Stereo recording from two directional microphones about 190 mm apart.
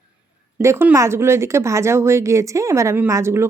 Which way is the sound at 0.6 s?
15° right (ahead or behind).